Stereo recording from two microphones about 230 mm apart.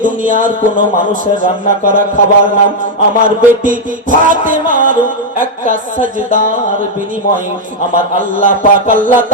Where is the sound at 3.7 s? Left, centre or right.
Right.